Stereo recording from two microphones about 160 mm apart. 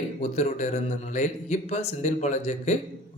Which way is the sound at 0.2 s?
45° left (ahead or behind).